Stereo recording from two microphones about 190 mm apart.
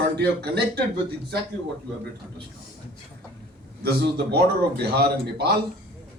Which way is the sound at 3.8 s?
60° right (ahead or behind).